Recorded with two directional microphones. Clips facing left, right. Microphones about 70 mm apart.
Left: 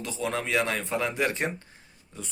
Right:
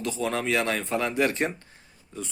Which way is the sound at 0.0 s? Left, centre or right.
Centre.